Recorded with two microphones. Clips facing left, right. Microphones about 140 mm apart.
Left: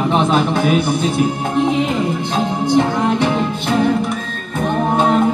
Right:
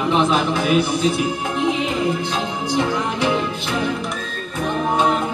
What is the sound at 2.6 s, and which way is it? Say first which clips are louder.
Music: left 6 dB; 50° left (ahead or behind).